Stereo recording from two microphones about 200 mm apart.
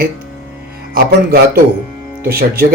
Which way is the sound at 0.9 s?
50° right (ahead or behind).